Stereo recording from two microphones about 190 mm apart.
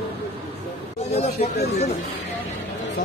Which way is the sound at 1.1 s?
35° left (ahead or behind).